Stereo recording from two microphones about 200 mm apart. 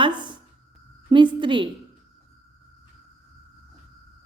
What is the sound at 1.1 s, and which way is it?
Speech, 25° right (ahead or behind).